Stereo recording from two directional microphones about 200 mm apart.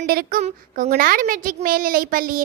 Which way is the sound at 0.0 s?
50° right (ahead or behind).